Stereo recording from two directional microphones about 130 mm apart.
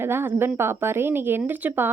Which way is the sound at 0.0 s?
20° right (ahead or behind).